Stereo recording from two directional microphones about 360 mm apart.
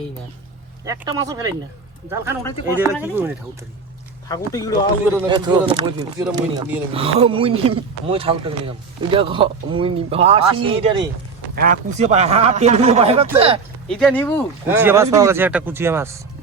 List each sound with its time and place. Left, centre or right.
1.2 s speech: centre
2.4 s speech: centre
2.8 s speech: centre
4.3 s speech: centre
5.3 s speech: centre
13.8 s speech: centre
14.7 s speech: centre